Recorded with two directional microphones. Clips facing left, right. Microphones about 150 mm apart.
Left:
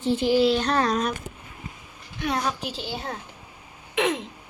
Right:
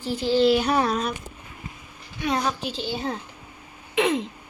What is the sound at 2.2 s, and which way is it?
Speech, centre (ahead or behind).